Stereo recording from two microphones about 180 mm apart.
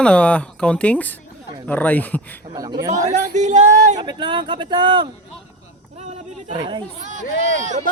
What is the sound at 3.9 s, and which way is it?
Speech, 25° right (ahead or behind).